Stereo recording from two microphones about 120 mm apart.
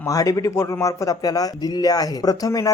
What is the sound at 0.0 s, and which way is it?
Speech, 30° left (ahead or behind).